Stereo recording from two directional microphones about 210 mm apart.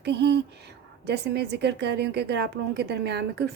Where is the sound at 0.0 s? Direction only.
50° right (ahead or behind).